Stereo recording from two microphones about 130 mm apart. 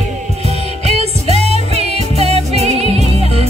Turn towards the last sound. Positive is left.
turn(degrees=-50)  # may be behind; listen again after turning